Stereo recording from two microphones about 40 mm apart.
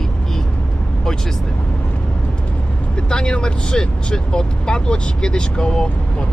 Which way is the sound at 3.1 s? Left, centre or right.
Left.